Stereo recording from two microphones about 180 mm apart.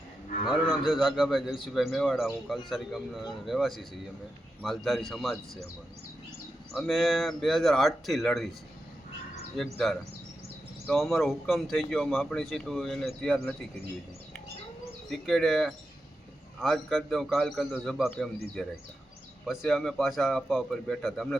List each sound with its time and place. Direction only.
0.4 s a man's voice: centre (ahead or behind)
6.7 s a man's voice: centre (ahead or behind)
9.7 s a man's voice: centre (ahead or behind)
15.1 s a man's voice: centre (ahead or behind)